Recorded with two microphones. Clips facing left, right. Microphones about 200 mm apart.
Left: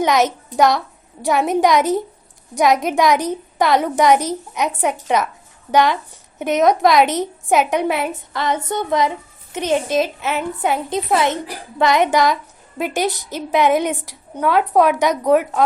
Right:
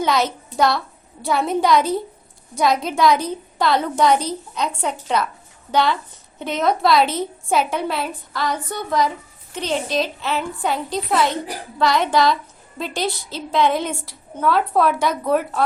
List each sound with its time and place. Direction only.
0.0 s a child's voice: 15° left (ahead or behind)
10.7 s a woman's voice: 20° left (ahead or behind)